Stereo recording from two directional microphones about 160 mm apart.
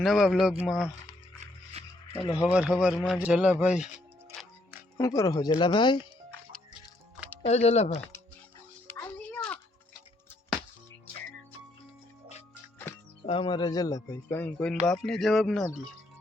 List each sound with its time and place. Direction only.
0.0 s speech: centre (ahead or behind)
2.5 s speech: 5° right (ahead or behind)
4.9 s speech: 20° left (ahead or behind)
7.4 s speech: 40° left (ahead or behind)
8.9 s music: 10° left (ahead or behind)
13.2 s a man's voice: 35° left (ahead or behind); by 15.6 s centre (ahead or behind)